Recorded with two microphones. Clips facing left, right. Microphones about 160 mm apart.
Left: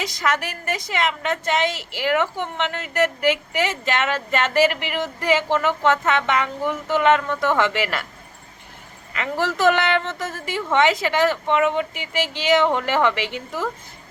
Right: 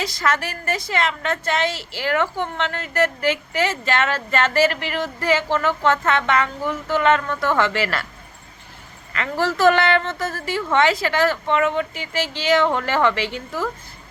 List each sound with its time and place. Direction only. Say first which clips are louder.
0.0 s a woman's voice: right 1 dB; 15° left (ahead or behind)
9.1 s a woman's voice: right 1 dB; 15° left (ahead or behind)